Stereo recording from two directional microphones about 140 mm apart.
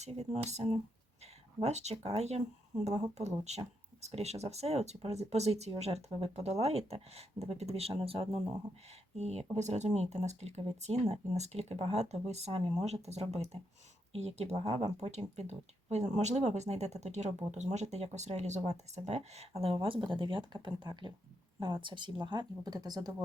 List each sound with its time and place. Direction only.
0.0 s speech: 50° right (ahead or behind); by 23.1 s 25° right (ahead or behind)